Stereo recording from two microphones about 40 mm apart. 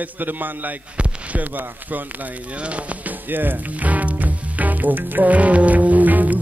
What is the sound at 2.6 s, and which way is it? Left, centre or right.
Speech, right.